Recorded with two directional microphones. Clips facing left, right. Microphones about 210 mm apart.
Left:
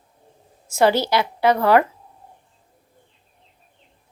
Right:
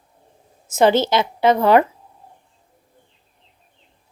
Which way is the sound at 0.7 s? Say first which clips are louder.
Right 2 dB; 20° right (ahead or behind).